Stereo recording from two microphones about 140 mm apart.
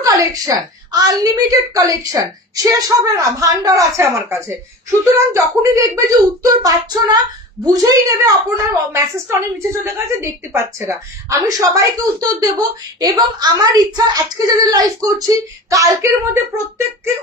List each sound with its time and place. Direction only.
0.0 s a woman's voice: 25° right (ahead or behind)